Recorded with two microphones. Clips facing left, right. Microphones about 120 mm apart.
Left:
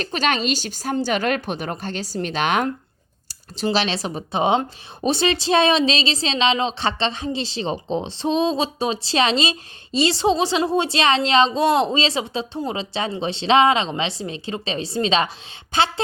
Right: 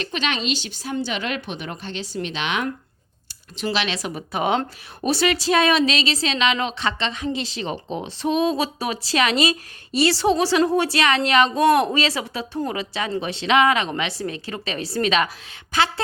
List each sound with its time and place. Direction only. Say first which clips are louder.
0.0 s a woman's voice: left 4 dB; 40° left (ahead or behind)
3.2 s speech: left 3 dB; 35° left (ahead or behind)